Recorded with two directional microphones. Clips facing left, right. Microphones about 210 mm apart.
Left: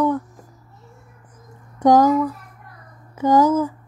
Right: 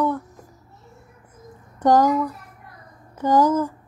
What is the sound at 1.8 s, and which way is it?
Speech, 10° left (ahead or behind).